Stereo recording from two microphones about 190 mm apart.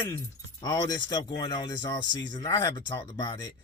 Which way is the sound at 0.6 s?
20° left (ahead or behind).